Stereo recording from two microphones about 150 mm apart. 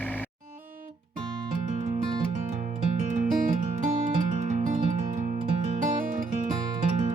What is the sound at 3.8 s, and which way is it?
Music, 60° right (ahead or behind).